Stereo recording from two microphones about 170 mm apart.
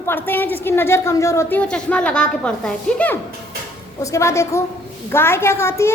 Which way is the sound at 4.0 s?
20° left (ahead or behind).